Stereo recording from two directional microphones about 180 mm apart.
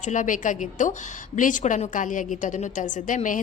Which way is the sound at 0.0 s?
45° left (ahead or behind).